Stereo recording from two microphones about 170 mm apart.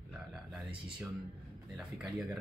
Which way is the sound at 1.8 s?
Centre (ahead or behind).